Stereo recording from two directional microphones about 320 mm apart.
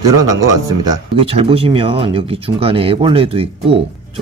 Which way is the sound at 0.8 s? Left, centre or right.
Centre.